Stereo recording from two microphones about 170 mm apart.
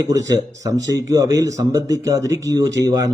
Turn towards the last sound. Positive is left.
turn(degrees=-20)  # may be behind; listen again after turning